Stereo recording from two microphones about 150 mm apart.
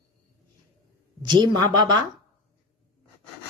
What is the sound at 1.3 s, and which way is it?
Speech, 30° right (ahead or behind).